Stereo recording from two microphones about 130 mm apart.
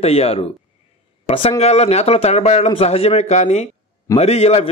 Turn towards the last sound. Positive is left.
turn(degrees=50)  # may be behind; listen again after turning